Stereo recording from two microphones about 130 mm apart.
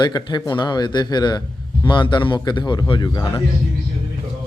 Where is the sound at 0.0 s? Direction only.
35° left (ahead or behind).